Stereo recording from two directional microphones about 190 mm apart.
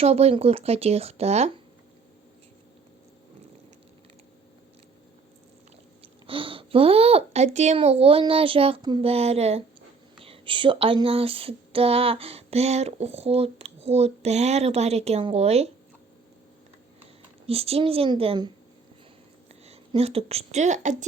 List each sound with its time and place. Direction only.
0.0 s speech: 35° right (ahead or behind)
6.0 s speech: 30° right (ahead or behind)
17.4 s speech: 30° right (ahead or behind)
19.6 s a woman's voice: 30° right (ahead or behind)